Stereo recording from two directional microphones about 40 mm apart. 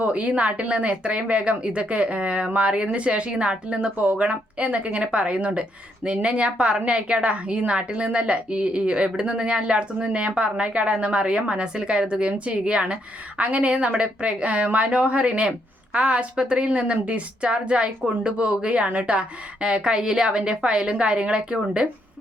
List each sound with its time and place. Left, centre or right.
0.0 s speech: right
19.6 s speech: right